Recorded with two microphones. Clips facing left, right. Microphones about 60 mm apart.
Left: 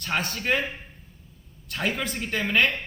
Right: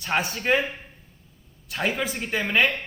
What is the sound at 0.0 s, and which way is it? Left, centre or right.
Speech, centre.